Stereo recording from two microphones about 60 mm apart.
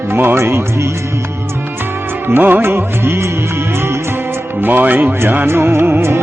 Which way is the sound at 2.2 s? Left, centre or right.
Right.